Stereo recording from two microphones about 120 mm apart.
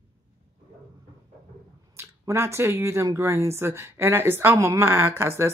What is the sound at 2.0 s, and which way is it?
Speech, 20° right (ahead or behind).